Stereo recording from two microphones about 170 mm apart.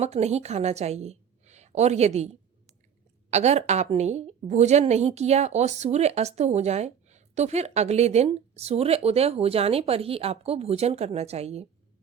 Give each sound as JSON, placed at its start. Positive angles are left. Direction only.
{"t": 0.0, "sound": "a woman's voice", "side_deg": -40}